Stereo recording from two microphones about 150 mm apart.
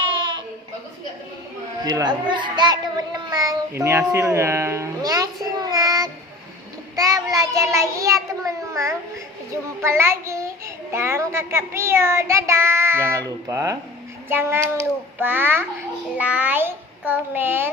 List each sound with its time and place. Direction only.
0.0 s a sound: 35° right (ahead or behind)
1.8 s a child's voice: 30° right (ahead or behind)
5.5 s child singing: 25° right (ahead or behind)
6.9 s a child's voice: 25° right (ahead or behind)
9.8 s child singing: 15° right (ahead or behind)